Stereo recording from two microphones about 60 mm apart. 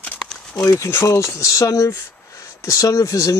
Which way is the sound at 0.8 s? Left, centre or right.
Left.